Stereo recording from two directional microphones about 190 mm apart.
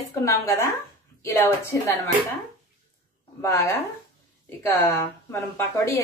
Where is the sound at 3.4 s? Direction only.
15° left (ahead or behind).